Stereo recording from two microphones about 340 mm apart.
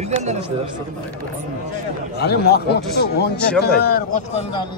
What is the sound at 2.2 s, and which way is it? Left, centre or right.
Speech, left.